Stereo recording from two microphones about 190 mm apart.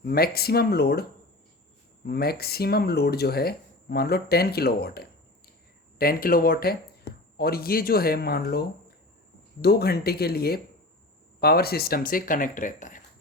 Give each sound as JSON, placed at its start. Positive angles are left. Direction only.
{"t": 0.0, "sound": "speech", "side_deg": 55}
{"t": 2.0, "sound": "speech", "side_deg": 55}